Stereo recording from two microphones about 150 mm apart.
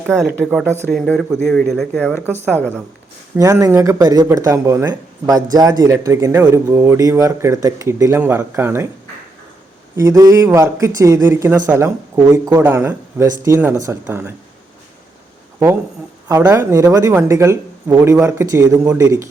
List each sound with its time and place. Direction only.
0.9 s a woman's voice: centre (ahead or behind)
3.3 s speech: 20° right (ahead or behind)
9.9 s speech: 20° right (ahead or behind)
16.3 s speech: 20° right (ahead or behind)